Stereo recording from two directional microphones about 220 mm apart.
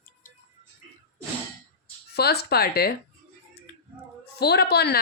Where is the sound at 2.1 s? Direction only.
45° left (ahead or behind).